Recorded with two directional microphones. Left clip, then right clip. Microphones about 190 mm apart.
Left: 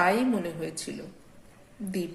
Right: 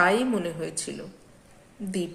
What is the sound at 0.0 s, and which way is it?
A woman's voice, 15° right (ahead or behind).